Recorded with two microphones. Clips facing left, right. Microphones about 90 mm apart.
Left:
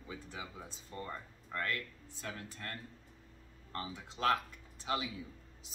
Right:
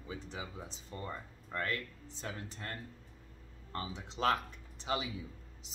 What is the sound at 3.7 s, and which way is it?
Speech, 25° right (ahead or behind).